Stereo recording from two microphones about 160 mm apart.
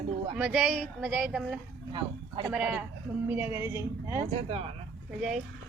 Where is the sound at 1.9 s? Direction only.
30° right (ahead or behind).